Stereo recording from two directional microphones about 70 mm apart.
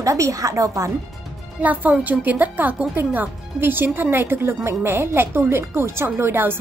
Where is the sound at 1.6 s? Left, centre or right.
Right.